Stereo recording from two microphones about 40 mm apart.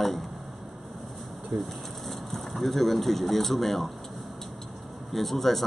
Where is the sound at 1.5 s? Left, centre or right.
Centre.